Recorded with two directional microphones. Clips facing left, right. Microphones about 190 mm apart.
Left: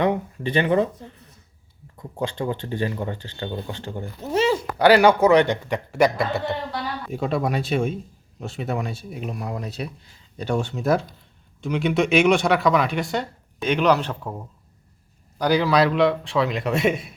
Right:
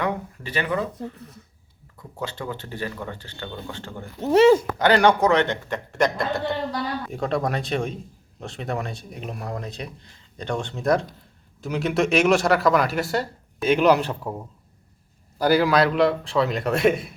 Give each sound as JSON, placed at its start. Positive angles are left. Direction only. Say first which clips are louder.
{"t": 0.0, "sound": "speech", "louder": "left 5 dB", "side_deg": 25}
{"t": 2.4, "sound": "speech", "louder": "left 7 dB", "side_deg": 20}
{"t": 4.3, "sound": "speech", "louder": "right 7 dB", "side_deg": -65}
{"t": 4.8, "sound": "a man's voice", "louder": "left 3 dB", "side_deg": 10}